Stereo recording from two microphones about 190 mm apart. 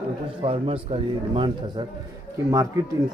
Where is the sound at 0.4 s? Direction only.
30° right (ahead or behind).